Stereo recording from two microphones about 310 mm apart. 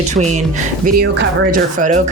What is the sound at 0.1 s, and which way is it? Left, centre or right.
Speech, right.